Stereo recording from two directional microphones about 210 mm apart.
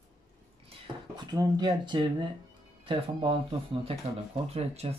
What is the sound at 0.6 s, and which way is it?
Speech, 20° right (ahead or behind).